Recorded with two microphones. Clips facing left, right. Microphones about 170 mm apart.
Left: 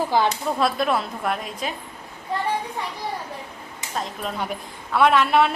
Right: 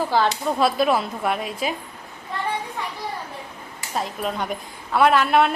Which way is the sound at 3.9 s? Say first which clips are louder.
Right 3 dB; 5° right (ahead or behind).